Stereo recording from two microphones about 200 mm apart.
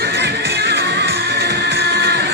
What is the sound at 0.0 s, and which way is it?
Music, 55° right (ahead or behind).